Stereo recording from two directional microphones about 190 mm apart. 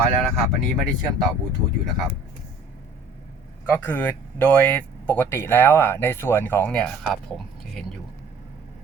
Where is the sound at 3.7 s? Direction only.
10° left (ahead or behind).